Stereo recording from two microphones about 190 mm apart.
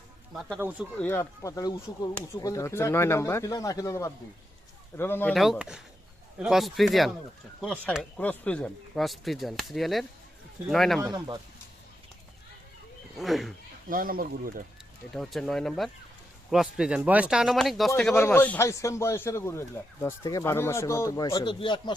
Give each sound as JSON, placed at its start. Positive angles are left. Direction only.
{"t": 0.3, "sound": "speech", "side_deg": 0}
{"t": 0.9, "sound": "speech", "side_deg": 10}
{"t": 13.1, "sound": "speech", "side_deg": 0}
{"t": 13.9, "sound": "speech", "side_deg": -50}
{"t": 15.1, "sound": "speech", "side_deg": 0}